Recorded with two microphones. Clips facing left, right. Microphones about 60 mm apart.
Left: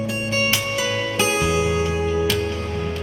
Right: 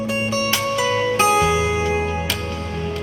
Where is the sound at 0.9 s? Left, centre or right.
Right.